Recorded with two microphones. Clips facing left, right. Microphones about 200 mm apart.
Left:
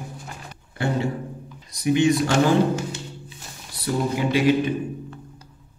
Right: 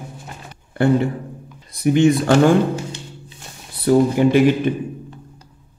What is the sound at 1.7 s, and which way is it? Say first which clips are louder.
Speech: right 5 dB; 55° right (ahead or behind).